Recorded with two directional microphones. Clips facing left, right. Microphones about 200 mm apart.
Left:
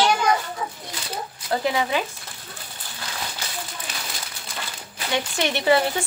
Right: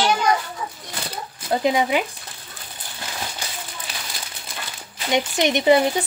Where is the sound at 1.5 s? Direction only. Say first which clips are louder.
Right 4 dB; 20° right (ahead or behind).